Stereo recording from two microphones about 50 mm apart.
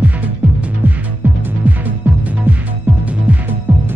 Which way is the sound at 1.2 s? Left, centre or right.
Right.